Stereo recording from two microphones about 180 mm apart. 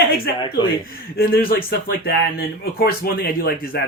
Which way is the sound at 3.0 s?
60° left (ahead or behind).